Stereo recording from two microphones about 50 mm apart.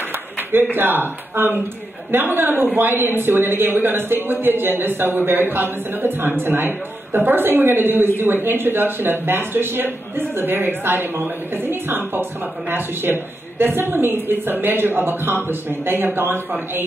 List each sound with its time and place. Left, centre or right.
0.5 s speech: right